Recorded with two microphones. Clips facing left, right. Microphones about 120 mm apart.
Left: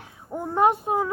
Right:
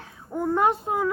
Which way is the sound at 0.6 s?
20° left (ahead or behind).